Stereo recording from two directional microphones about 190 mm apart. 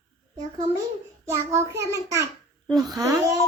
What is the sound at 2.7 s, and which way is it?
Speech, 20° right (ahead or behind).